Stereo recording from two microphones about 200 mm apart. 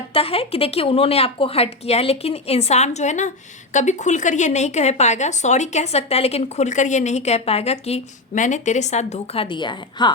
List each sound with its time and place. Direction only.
0.1 s speech: 30° left (ahead or behind)